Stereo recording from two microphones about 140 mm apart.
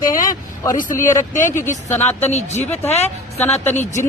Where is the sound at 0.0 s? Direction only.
75° left (ahead or behind).